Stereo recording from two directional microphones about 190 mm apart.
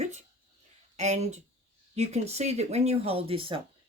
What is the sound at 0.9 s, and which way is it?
Speech, 35° right (ahead or behind).